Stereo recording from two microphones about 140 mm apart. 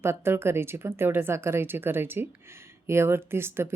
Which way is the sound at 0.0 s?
15° right (ahead or behind).